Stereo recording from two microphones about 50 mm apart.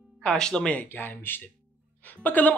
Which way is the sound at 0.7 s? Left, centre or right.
Left.